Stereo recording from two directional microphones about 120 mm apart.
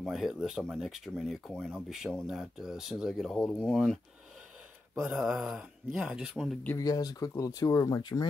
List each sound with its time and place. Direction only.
0.0 s speech: centre (ahead or behind)
5.1 s speech: 5° right (ahead or behind)
6.8 s speech: 30° left (ahead or behind)